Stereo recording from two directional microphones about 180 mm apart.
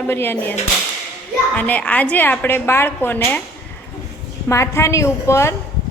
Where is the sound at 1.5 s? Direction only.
10° left (ahead or behind).